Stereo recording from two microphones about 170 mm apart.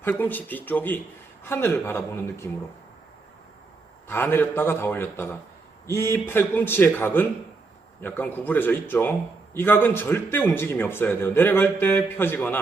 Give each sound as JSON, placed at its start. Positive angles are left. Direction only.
{"t": 0.0, "sound": "a man's voice", "side_deg": 10}
{"t": 4.1, "sound": "a man's voice", "side_deg": 10}